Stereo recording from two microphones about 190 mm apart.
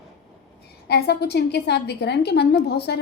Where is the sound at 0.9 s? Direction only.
60° left (ahead or behind).